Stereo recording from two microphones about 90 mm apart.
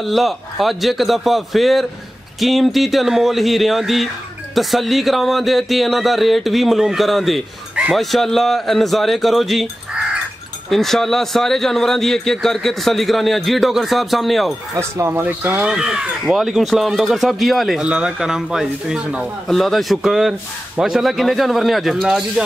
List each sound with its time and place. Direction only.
0.0 s a man's voice: centre (ahead or behind)
15.0 s speech: 20° right (ahead or behind)
15.6 s a man's voice: 10° right (ahead or behind)